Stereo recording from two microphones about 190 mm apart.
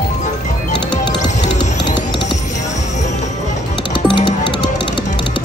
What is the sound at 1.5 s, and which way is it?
Music, 25° left (ahead or behind).